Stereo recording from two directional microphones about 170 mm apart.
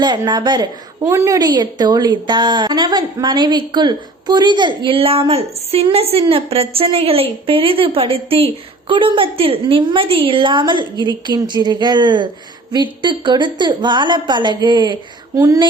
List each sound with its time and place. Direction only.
0.0 s a woman's voice: 25° right (ahead or behind)